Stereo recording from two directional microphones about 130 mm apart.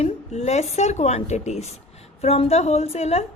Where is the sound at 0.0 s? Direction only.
60° left (ahead or behind).